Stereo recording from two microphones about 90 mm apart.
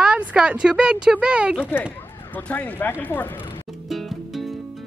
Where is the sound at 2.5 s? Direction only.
20° left (ahead or behind).